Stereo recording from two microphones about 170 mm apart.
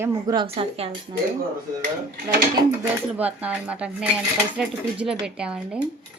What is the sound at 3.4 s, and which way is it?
A woman's voice, 10° right (ahead or behind).